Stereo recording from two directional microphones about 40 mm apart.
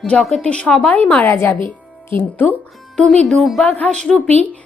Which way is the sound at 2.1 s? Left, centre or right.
Left.